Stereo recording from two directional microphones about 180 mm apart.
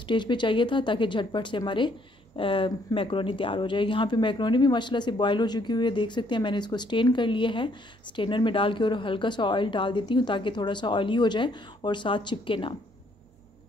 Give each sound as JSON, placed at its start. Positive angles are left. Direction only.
{"t": 0.0, "sound": "speech", "side_deg": 25}